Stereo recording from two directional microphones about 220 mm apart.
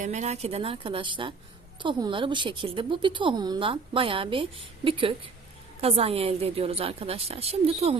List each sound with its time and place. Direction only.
0.0 s a woman's voice: 30° right (ahead or behind)